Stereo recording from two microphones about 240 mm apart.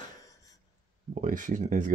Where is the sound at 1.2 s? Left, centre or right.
Right.